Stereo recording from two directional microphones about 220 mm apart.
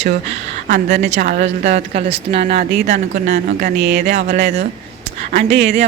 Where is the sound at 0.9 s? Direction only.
45° right (ahead or behind).